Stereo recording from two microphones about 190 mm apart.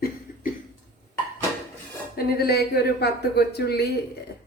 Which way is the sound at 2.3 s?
55° left (ahead or behind).